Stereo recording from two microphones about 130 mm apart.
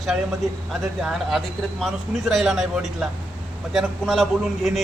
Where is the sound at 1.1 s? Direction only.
Centre (ahead or behind).